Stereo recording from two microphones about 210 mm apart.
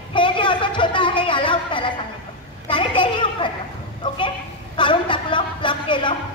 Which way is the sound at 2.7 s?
25° left (ahead or behind).